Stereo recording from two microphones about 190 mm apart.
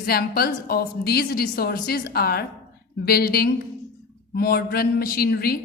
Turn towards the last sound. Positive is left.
turn(degrees=55)  # may be behind; listen again after turning